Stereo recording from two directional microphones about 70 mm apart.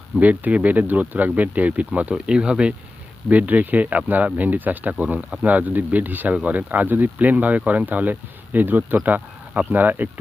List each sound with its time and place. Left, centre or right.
0.2 s speech: right